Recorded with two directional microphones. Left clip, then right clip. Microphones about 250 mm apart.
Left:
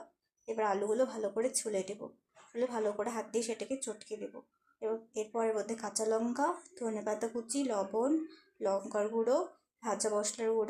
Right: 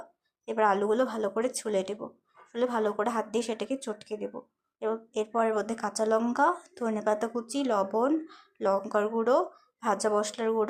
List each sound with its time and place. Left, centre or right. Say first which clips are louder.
0.4 s speech: right 7 dB; centre